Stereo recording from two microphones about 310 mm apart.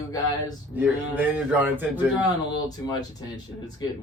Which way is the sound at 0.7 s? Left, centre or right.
Centre.